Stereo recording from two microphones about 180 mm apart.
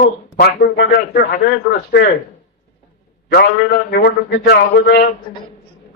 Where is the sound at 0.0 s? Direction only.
60° left (ahead or behind).